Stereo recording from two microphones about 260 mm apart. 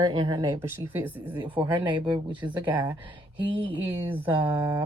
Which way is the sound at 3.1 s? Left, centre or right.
Centre.